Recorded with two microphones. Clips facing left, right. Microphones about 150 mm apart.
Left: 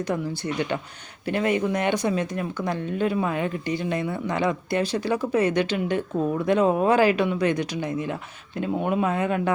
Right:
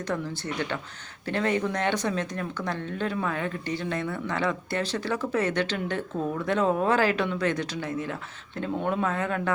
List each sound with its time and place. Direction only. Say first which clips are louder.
0.1 s speech: left 4 dB; 15° left (ahead or behind)